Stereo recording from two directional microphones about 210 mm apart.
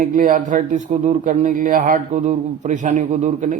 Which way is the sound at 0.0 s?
40° right (ahead or behind).